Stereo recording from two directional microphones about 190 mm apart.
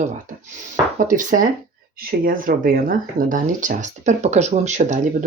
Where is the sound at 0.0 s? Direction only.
40° right (ahead or behind).